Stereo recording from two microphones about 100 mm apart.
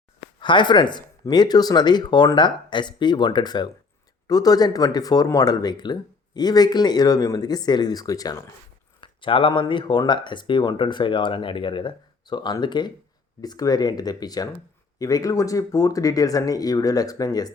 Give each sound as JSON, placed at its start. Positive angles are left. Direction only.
{"t": 0.3, "sound": "speech", "side_deg": 50}
{"t": 9.0, "sound": "speech", "side_deg": 60}